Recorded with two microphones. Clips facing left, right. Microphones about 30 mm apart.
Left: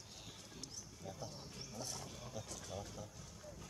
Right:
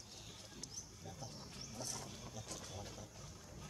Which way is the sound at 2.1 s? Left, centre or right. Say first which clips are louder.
Left 1 dB; centre.